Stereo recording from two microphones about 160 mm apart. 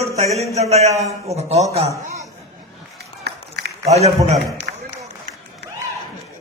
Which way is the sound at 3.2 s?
90° right.